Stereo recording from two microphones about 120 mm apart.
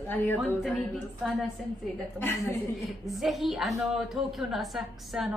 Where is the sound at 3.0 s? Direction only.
Centre (ahead or behind).